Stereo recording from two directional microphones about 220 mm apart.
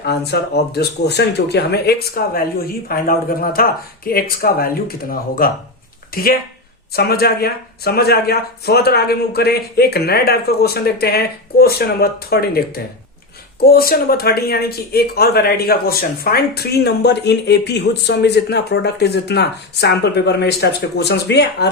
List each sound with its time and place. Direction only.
0.0 s speech: 50° left (ahead or behind)